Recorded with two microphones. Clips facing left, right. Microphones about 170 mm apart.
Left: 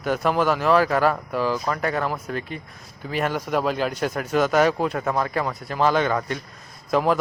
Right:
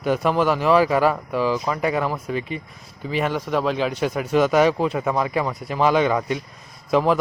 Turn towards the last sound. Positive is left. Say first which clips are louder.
# right 2 dB
turn(degrees=0)  # may be behind; listen again after turning